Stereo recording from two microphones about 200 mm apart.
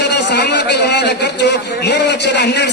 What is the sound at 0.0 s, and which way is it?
A man's voice, 55° left (ahead or behind).